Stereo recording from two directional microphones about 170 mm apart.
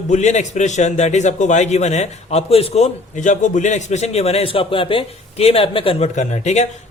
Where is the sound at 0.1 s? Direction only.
45° left (ahead or behind).